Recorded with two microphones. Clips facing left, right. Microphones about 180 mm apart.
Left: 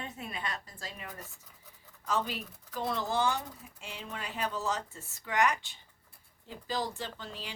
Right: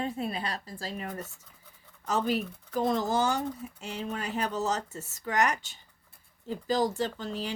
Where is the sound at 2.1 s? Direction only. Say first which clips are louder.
Right 5 dB; 45° right (ahead or behind).